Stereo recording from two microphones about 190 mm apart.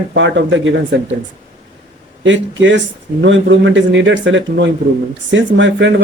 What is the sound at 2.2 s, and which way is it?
Speech, 75° right (ahead or behind).